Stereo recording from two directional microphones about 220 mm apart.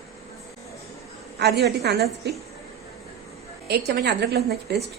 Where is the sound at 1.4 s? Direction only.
50° right (ahead or behind).